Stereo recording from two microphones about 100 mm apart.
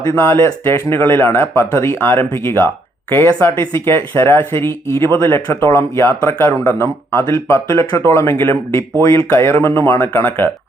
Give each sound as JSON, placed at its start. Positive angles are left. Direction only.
{"t": 0.2, "sound": "speech", "side_deg": 25}